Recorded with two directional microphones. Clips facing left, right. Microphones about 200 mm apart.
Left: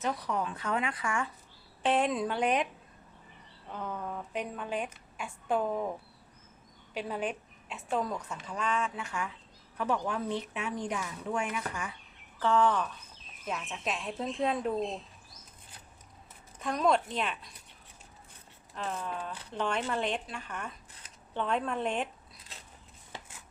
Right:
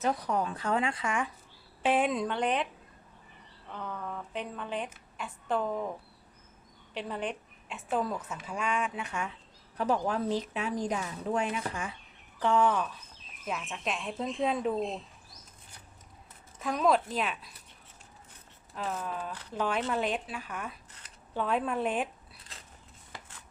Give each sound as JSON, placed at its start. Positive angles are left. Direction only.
{"t": 0.0, "sound": "a woman's voice", "side_deg": -40}
{"t": 1.8, "sound": "a woman's voice", "side_deg": -5}
{"t": 3.7, "sound": "a woman's voice", "side_deg": 15}
{"t": 6.9, "sound": "a woman's voice", "side_deg": 10}
{"t": 9.7, "sound": "a woman's voice", "side_deg": -35}
{"t": 12.4, "sound": "a woman's voice", "side_deg": -10}
{"t": 16.6, "sound": "a woman's voice", "side_deg": 0}
{"t": 18.7, "sound": "a woman's voice", "side_deg": -5}